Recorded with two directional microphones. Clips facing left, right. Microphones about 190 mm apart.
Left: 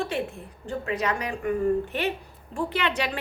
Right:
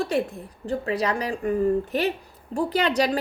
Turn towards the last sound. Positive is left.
turn(degrees=-40)  # may be behind; listen again after turning